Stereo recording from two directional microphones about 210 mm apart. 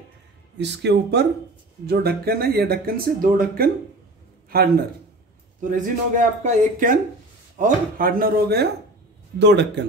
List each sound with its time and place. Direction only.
0.6 s a man's voice: 55° right (ahead or behind)